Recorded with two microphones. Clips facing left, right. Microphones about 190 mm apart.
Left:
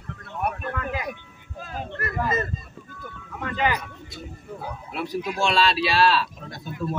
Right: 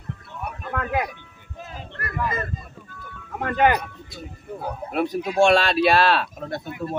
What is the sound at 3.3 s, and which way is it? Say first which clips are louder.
Speech: right 6 dB; 55° right (ahead or behind).